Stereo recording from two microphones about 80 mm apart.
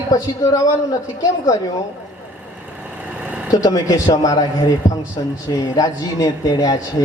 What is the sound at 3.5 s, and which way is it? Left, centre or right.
Speech, left.